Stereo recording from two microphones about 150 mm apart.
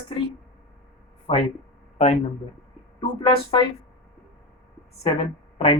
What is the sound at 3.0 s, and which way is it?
Speech, 35° left (ahead or behind).